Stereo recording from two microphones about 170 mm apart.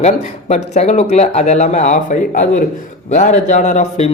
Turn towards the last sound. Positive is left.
turn(degrees=40)  # may be behind; listen again after turning